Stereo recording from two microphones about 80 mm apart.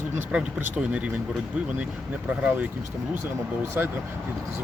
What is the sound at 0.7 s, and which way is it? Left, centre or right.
Speech, centre.